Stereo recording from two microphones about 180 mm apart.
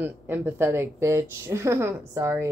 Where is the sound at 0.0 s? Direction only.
10° right (ahead or behind).